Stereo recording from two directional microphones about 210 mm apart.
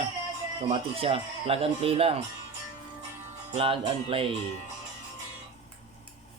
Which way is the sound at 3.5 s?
25° right (ahead or behind).